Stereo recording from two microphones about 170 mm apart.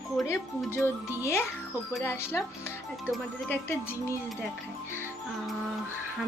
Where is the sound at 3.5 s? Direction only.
15° left (ahead or behind).